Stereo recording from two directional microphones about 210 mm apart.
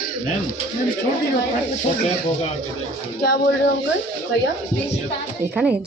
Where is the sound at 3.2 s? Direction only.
50° left (ahead or behind).